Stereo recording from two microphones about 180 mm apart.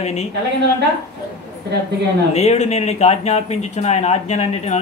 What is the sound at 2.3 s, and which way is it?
Speech, 35° left (ahead or behind).